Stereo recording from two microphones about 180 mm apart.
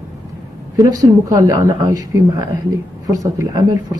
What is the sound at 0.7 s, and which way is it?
A woman's voice, 20° right (ahead or behind).